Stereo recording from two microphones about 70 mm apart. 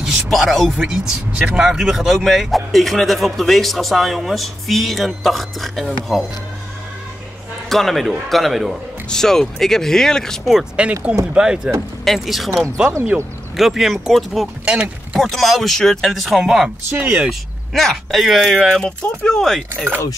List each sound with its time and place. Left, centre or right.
0.0 s speech: centre
0.7 s speech: centre
7.7 s speech: centre
10.4 s speech: centre
12.0 s speech: centre
13.1 s speech: centre
14.6 s speech: centre
15.1 s speech: centre
16.9 s speech: right
17.3 s speech: centre
18.8 s speech: centre